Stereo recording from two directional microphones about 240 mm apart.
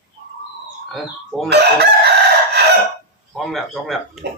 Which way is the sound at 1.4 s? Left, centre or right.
Right.